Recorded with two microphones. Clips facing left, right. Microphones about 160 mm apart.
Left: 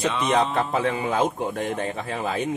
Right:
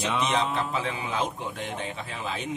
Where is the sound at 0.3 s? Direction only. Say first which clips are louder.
Left 5 dB; 50° left (ahead or behind).